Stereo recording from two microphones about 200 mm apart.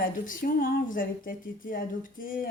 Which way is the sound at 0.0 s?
45° left (ahead or behind).